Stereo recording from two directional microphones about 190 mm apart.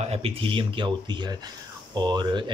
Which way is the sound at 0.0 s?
30° right (ahead or behind).